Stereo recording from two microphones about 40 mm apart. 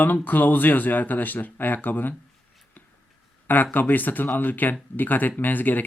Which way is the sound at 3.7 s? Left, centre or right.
Left.